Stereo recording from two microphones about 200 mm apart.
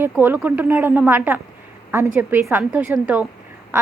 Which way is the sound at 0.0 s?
10° right (ahead or behind).